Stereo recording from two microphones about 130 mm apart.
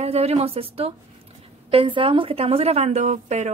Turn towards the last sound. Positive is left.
turn(degrees=-60)  # may be behind; listen again after turning